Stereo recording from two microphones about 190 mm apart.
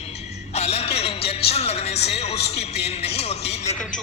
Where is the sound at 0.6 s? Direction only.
35° left (ahead or behind).